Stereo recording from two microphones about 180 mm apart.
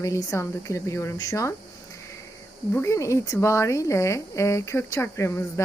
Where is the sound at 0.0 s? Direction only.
20° left (ahead or behind).